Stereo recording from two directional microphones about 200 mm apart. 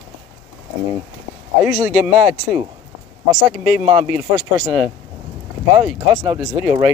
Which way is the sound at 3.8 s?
20° right (ahead or behind).